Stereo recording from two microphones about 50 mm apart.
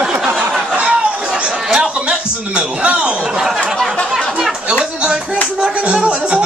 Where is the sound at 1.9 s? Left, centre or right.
Centre.